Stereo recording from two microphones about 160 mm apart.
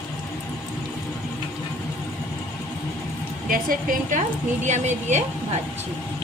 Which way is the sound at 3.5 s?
60° right (ahead or behind).